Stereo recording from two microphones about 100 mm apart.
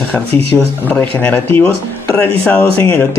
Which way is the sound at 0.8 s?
20° left (ahead or behind).